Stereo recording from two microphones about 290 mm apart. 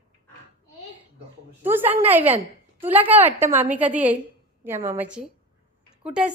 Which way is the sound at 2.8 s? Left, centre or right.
Centre.